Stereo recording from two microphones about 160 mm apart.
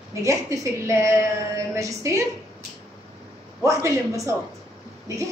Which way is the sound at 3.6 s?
20° right (ahead or behind).